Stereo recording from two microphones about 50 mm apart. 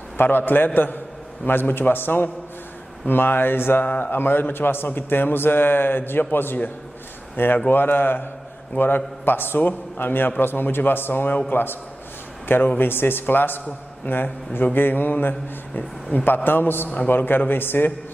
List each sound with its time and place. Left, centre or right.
0.2 s a man's voice: left
3.8 s a man's voice: left